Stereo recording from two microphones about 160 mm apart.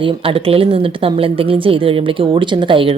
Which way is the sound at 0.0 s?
35° right (ahead or behind).